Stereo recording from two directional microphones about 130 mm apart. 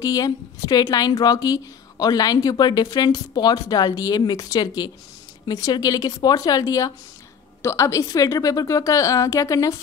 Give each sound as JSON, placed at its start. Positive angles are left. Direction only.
{"t": 0.0, "sound": "a woman's voice", "side_deg": 30}